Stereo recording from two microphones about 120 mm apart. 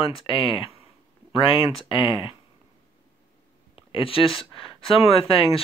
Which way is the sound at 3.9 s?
50° left (ahead or behind).